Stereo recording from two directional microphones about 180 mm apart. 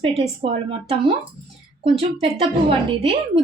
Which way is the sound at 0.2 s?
30° right (ahead or behind).